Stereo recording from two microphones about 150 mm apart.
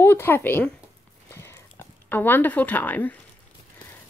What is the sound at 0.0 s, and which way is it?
Speech, 15° left (ahead or behind).